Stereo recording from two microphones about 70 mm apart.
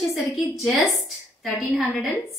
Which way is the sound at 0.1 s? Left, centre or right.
Centre.